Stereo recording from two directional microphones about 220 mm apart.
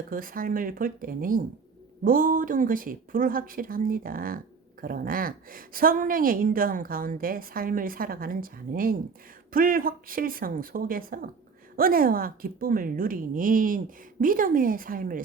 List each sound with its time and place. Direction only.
0.1 s a woman's voice: 40° right (ahead or behind)